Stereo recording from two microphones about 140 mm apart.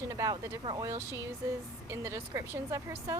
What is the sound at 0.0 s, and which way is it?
Speech, 20° right (ahead or behind).